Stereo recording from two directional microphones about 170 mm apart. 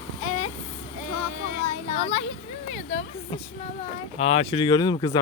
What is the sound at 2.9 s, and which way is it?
Speech, 40° left (ahead or behind).